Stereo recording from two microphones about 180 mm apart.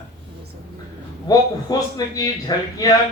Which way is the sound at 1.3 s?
20° left (ahead or behind).